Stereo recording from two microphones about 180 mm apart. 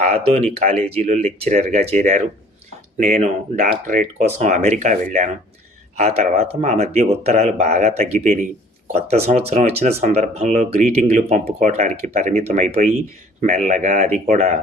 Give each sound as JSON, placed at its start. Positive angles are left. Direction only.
{"t": 0.5, "sound": "speech", "side_deg": -35}
{"t": 4.4, "sound": "speech", "side_deg": -40}